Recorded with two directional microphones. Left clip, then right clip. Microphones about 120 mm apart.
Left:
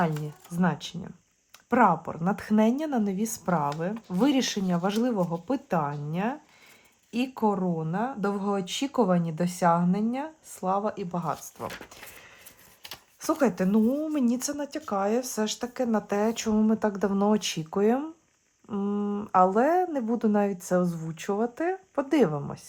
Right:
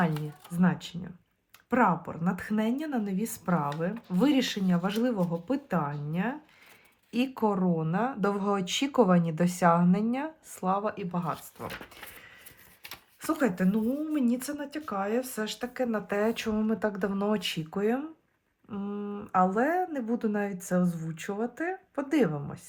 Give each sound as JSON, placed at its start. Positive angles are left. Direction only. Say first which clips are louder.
{"t": 0.6, "sound": "speech", "louder": "left 2 dB", "side_deg": 35}
{"t": 4.2, "sound": "speech", "louder": "left 1 dB", "side_deg": 35}
{"t": 7.1, "sound": "speech", "louder": "left 1 dB", "side_deg": 20}
{"t": 13.4, "sound": "speech", "louder": "left 4 dB", "side_deg": 40}
{"t": 14.8, "sound": "speech", "louder": "left 4 dB", "side_deg": 10}
{"t": 15.0, "sound": "speech", "louder": "left 3 dB", "side_deg": 30}
{"t": 21.4, "sound": "speech", "louder": "left 4 dB", "side_deg": 40}
{"t": 22.3, "sound": "speech", "louder": "left 4 dB", "side_deg": 25}